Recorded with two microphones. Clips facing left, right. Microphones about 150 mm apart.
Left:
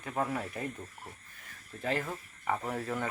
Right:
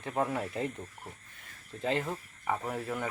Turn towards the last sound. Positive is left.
turn(degrees=-5)  # may be behind; listen again after turning